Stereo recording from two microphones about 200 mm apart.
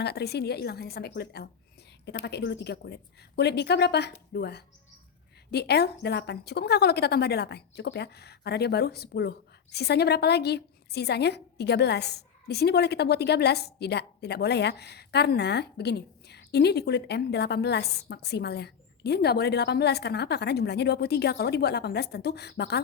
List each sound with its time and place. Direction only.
0.0 s a woman's voice: 55° left (ahead or behind)